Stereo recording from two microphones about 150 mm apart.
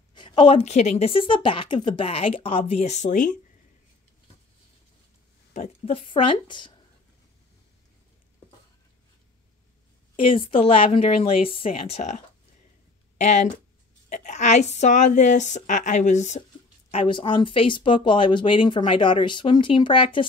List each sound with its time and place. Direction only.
0.1 s speech: 30° left (ahead or behind); by 3.3 s 55° left (ahead or behind)
5.9 s speech: 35° left (ahead or behind)
10.1 s speech: 35° left (ahead or behind)
13.2 s a woman's voice: 55° left (ahead or behind)
16.9 s speech: 35° left (ahead or behind)